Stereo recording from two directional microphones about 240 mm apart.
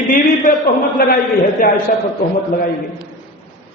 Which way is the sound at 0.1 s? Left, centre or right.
Left.